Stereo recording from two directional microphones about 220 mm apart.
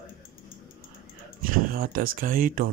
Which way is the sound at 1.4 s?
40° right (ahead or behind).